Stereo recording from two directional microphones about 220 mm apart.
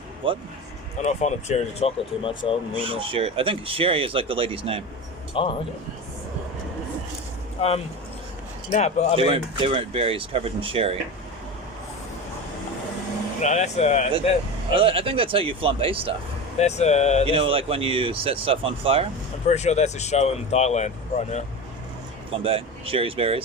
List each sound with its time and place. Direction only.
0.2 s speech: 25° right (ahead or behind)
1.0 s speech: 30° left (ahead or behind)
2.7 s speech: 25° right (ahead or behind)
5.3 s a man's voice: 25° left (ahead or behind)
7.6 s speech: 30° left (ahead or behind)
9.1 s speech: 25° right (ahead or behind)
13.4 s speech: 30° left (ahead or behind)
14.7 s speech: 25° right (ahead or behind)
16.6 s speech: 30° left (ahead or behind)
17.2 s speech: 25° right (ahead or behind)
19.5 s speech: 30° left (ahead or behind)
22.4 s speech: 25° right (ahead or behind)